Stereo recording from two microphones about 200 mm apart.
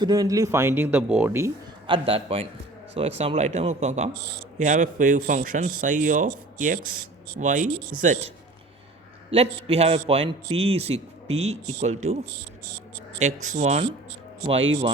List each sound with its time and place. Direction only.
0.0 s speech: 20° right (ahead or behind)
1.9 s a man's voice: 30° right (ahead or behind)
9.3 s a man's voice: 30° right (ahead or behind)